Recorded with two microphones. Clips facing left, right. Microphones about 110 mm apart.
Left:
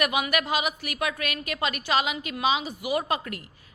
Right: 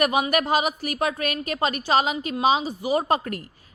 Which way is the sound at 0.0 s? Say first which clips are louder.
Right 4 dB; 35° right (ahead or behind).